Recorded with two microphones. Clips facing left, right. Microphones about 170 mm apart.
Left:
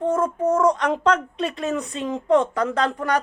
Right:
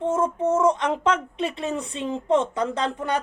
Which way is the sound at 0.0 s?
25° right (ahead or behind).